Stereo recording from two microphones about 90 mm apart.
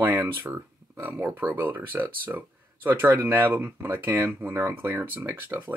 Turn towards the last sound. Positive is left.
turn(degrees=-20)  # may be behind; listen again after turning